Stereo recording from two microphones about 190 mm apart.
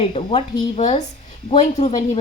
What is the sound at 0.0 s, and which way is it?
Speech, 30° left (ahead or behind).